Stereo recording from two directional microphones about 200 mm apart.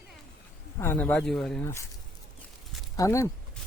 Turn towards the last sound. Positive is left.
turn(degrees=15)  # may be behind; listen again after turning